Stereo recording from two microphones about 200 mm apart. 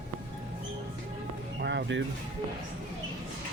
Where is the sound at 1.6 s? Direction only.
60° right (ahead or behind).